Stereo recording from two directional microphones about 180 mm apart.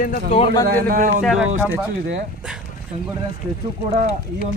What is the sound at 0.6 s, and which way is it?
Speech, 55° right (ahead or behind).